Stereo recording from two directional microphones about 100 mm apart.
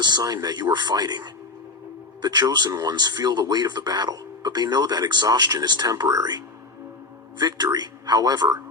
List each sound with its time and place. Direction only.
0.0 s speech: 40° right (ahead or behind)